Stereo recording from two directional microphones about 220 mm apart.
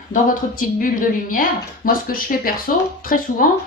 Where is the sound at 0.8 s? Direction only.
40° left (ahead or behind).